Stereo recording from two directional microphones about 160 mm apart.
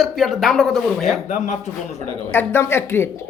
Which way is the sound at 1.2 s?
50° left (ahead or behind).